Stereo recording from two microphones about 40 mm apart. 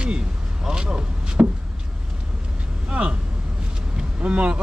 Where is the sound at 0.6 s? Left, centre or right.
Centre.